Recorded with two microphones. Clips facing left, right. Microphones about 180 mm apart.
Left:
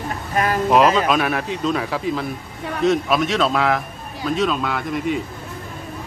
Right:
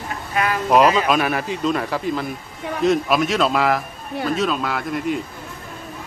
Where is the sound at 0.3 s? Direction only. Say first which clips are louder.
Left 1 dB; 40° left (ahead or behind).